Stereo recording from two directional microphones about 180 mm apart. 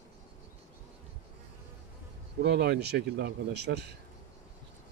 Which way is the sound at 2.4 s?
65° right (ahead or behind).